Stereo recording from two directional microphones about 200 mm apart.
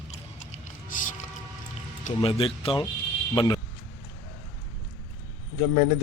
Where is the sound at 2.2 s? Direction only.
25° left (ahead or behind).